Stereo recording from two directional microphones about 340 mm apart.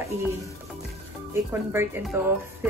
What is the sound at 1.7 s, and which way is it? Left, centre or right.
Speech, centre.